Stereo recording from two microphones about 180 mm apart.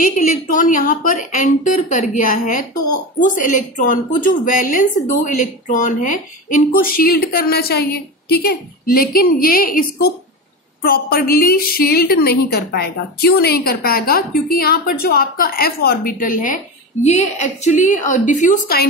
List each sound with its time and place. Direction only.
0.0 s a woman's voice: 45° left (ahead or behind)